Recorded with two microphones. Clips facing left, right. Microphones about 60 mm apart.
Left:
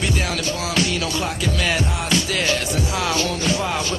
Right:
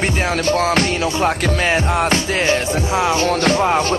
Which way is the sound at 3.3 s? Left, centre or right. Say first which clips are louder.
Right 7 dB; right.